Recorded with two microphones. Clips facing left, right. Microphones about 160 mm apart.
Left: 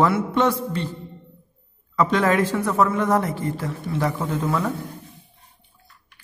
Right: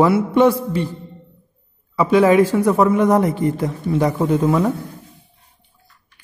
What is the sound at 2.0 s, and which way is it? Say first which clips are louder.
Speech: right 6 dB; 10° right (ahead or behind).